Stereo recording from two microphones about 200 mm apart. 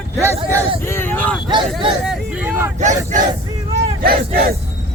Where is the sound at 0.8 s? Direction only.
10° left (ahead or behind).